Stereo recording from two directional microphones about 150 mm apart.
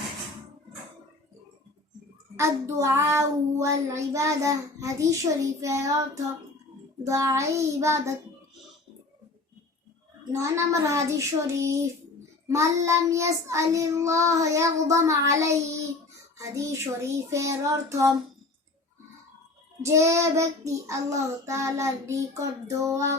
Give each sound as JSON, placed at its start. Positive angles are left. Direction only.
{"t": 2.3, "sound": "child singing", "side_deg": -20}
{"t": 7.0, "sound": "child singing", "side_deg": -20}
{"t": 10.3, "sound": "child singing", "side_deg": -20}
{"t": 19.8, "sound": "child singing", "side_deg": -20}